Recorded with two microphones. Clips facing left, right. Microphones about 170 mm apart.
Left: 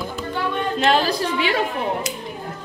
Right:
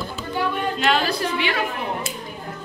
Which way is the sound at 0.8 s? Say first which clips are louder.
Left 3 dB; 40° left (ahead or behind).